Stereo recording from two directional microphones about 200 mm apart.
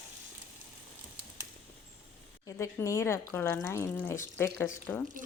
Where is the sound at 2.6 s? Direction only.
15° left (ahead or behind).